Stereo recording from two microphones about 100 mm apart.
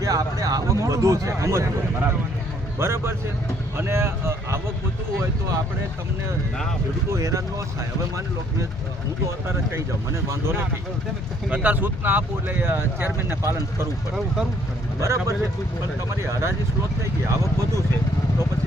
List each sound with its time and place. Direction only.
0.0 s speech: 35° right (ahead or behind)
7.1 s speech: 30° right (ahead or behind)
9.2 s speech: 30° right (ahead or behind)
15.0 s speech: 30° right (ahead or behind)
17.2 s speech: 30° right (ahead or behind)